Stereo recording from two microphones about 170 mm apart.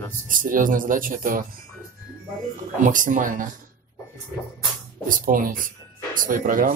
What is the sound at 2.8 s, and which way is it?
Speech, 50° right (ahead or behind).